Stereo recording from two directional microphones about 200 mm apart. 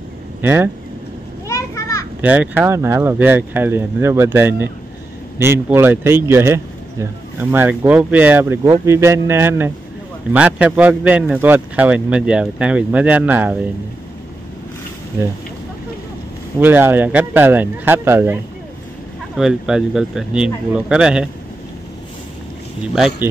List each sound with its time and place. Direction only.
0.4 s speech: 10° right (ahead or behind)
1.5 s children playing: 15° left (ahead or behind)
2.2 s speech: 5° right (ahead or behind)
16.5 s speech: 10° right (ahead or behind)